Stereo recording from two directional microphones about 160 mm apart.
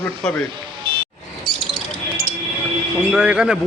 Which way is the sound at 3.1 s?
5° right (ahead or behind).